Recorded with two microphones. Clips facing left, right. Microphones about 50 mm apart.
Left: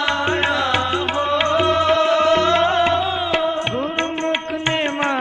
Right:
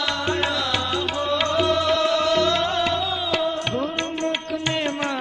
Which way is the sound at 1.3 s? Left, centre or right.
Left.